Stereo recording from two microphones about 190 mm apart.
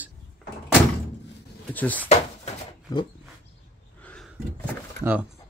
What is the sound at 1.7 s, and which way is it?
Speech, 10° left (ahead or behind).